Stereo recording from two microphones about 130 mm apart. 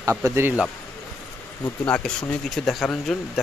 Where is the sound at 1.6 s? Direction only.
15° left (ahead or behind).